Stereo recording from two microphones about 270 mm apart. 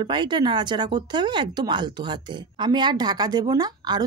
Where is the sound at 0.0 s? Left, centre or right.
Centre.